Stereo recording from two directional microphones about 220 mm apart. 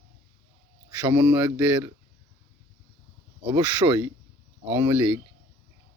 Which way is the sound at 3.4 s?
15° right (ahead or behind).